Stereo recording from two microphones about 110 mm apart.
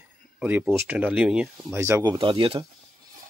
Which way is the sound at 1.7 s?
25° right (ahead or behind).